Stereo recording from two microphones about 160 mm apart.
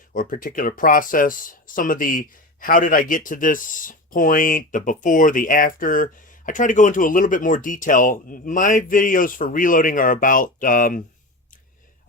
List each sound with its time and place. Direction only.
0.1 s speech: 55° left (ahead or behind)